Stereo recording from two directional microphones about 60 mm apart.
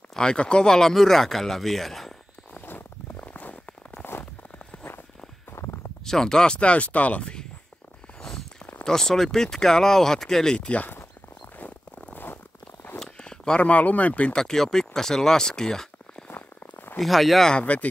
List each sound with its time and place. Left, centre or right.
0.1 s speech: centre
2.6 s a sound: left
6.0 s speech: centre
8.2 s a sound: centre
8.8 s speech: centre
11.5 s zipper: left
13.0 s speech: centre
14.3 s speech: centre
16.3 s a sound: left
17.0 s speech: centre
17.5 s speech: left